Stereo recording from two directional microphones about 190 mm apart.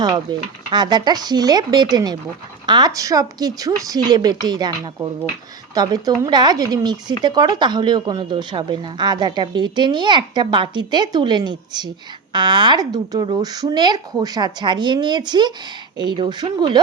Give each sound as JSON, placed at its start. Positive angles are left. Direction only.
{"t": 0.3, "sound": "speech", "side_deg": -20}
{"t": 5.7, "sound": "speech", "side_deg": -20}